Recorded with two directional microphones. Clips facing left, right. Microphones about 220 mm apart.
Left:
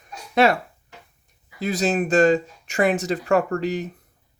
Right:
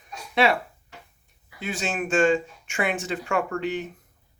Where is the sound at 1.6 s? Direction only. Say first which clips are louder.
Left 7 dB; 40° left (ahead or behind).